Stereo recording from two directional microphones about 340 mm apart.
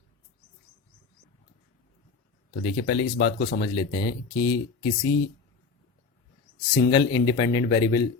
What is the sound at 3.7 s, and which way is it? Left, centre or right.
Speech, centre.